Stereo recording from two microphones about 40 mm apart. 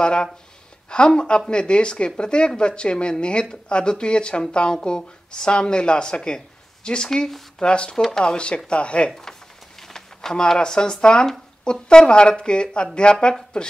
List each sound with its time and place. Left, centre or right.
0.0 s speech: left
7.2 s speech: centre
7.6 s speech: left
7.9 s speech: centre
8.2 s speech: left
9.8 s speech: centre